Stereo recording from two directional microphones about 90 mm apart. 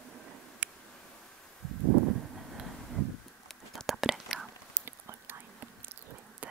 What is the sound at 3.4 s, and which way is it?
Whispering, centre (ahead or behind).